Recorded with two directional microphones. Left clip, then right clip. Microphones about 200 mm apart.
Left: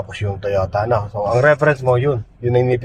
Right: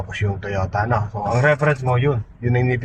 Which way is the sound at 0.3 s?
25° left (ahead or behind).